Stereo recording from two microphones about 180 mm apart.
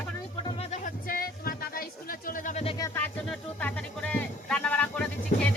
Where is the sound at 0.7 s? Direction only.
50° left (ahead or behind).